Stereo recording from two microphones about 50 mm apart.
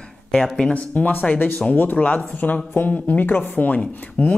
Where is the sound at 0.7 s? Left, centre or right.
Left.